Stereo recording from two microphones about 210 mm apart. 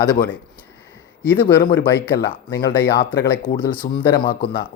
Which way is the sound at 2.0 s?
50° left (ahead or behind).